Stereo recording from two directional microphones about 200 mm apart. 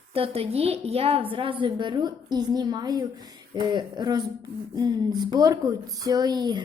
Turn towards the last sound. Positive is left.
turn(degrees=-20)  # may be behind; listen again after turning